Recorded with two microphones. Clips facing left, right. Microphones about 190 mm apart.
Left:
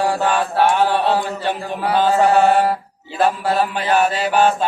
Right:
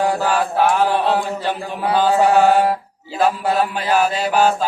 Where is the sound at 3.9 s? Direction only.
Centre (ahead or behind).